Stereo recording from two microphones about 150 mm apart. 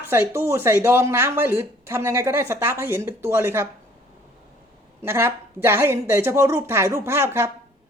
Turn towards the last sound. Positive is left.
turn(degrees=-15)  # may be behind; listen again after turning